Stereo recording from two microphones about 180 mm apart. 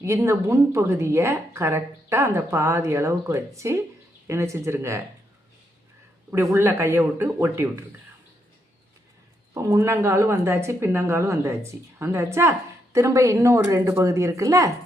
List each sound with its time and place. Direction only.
0.0 s speech: 15° right (ahead or behind)
6.3 s speech: 15° right (ahead or behind)
9.6 s speech: 15° right (ahead or behind)